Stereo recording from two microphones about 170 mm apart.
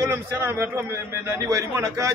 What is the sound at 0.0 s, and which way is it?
A man's voice, 15° right (ahead or behind).